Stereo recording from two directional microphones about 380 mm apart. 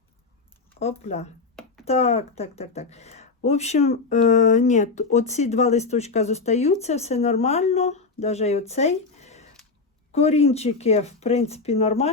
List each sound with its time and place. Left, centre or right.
0.7 s speech: centre